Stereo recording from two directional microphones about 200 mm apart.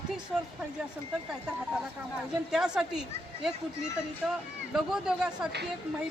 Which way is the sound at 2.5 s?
5° right (ahead or behind).